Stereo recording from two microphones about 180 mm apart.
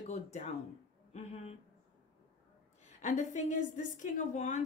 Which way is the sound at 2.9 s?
40° left (ahead or behind).